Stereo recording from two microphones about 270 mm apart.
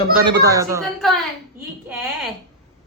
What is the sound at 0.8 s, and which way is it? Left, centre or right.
Speech, centre.